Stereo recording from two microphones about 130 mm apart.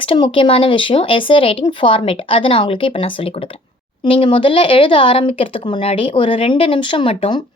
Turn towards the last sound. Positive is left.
turn(degrees=45)  # may be behind; listen again after turning